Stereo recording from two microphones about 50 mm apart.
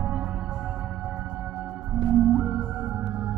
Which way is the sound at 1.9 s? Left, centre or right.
Centre.